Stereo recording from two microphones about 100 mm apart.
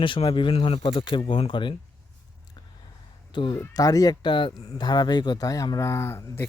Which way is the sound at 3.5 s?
35° left (ahead or behind).